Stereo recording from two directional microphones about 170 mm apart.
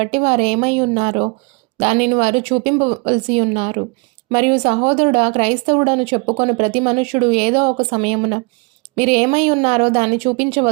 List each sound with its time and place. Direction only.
0.0 s speech: 35° right (ahead or behind)